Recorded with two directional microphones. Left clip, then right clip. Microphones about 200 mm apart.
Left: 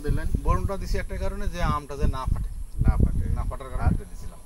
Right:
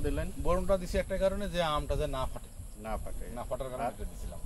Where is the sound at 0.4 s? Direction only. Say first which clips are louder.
Right 1 dB; 5° left (ahead or behind).